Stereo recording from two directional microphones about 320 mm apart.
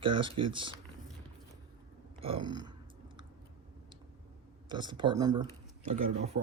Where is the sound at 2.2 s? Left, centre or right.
Centre.